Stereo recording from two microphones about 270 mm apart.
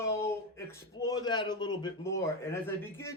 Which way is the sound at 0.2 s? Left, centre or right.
Centre.